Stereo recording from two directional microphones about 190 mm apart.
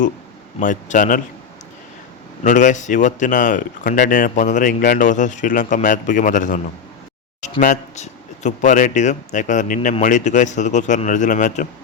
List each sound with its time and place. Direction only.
0.6 s speech: 45° left (ahead or behind)
2.4 s speech: 40° left (ahead or behind)
7.6 s speech: 40° left (ahead or behind)